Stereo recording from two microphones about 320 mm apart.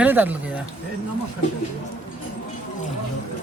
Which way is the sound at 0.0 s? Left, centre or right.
Centre.